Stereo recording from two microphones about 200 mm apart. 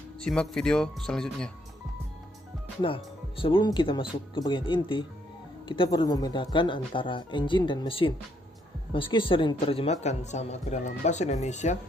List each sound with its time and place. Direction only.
0.2 s speech: 5° left (ahead or behind)
2.8 s speech: 25° left (ahead or behind)